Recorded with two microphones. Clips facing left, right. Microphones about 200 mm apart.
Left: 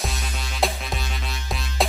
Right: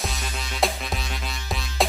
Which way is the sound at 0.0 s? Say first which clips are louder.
Even; centre (ahead or behind).